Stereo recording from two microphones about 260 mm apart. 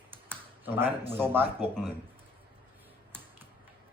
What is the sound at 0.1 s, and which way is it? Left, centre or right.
Computer keyboard, centre.